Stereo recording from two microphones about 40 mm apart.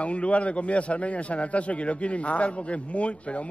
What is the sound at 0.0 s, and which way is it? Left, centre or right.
A man's voice, left.